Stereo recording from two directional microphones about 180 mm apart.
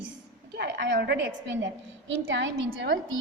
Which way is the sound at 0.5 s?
70° right (ahead or behind).